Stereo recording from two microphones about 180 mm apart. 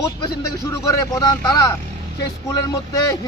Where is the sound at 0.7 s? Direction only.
20° left (ahead or behind).